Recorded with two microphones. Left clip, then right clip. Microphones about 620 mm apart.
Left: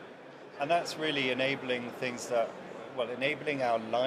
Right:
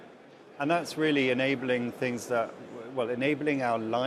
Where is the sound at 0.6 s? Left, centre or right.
Right.